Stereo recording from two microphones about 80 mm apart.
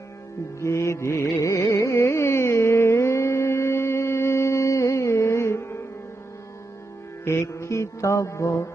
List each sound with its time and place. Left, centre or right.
0.6 s music: left
7.3 s music: left